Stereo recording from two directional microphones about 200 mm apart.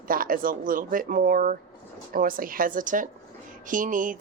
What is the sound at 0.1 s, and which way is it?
A woman's voice, 45° right (ahead or behind).